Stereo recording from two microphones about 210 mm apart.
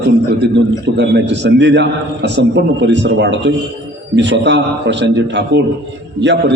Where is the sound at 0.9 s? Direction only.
55° right (ahead or behind).